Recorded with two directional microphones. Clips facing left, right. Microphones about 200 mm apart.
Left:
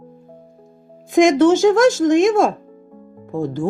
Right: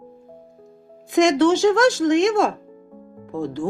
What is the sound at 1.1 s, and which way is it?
Speech, 50° left (ahead or behind).